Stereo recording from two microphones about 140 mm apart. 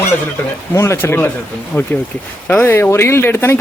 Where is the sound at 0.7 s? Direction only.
15° left (ahead or behind).